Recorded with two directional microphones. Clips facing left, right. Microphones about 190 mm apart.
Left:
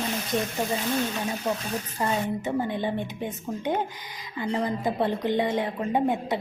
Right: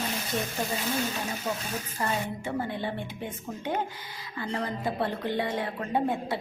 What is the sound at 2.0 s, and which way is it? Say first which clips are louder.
Speech: left 4 dB; 20° left (ahead or behind).